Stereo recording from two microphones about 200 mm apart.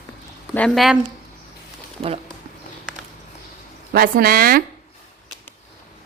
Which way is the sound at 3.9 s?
50° right (ahead or behind).